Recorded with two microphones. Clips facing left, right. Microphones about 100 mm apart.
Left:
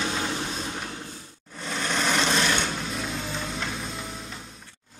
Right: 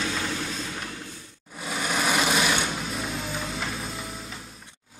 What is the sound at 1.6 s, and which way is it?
Sewing machine, 10° right (ahead or behind).